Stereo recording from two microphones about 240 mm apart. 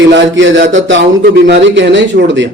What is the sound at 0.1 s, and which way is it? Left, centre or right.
A man's voice, right.